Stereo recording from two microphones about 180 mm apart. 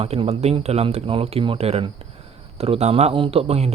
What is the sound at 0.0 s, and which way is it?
Speech, 35° right (ahead or behind).